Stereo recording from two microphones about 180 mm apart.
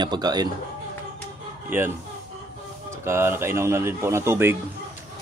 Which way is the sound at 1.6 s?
10° right (ahead or behind).